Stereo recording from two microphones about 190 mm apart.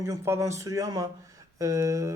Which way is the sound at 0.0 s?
15° right (ahead or behind).